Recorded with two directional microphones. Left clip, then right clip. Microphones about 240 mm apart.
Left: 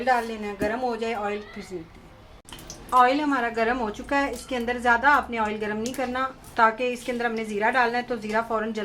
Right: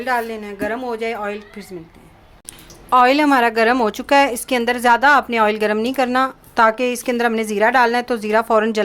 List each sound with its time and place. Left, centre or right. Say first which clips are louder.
0.0 s a woman's voice: right 3 dB; right
2.9 s a woman's voice: right 7 dB; right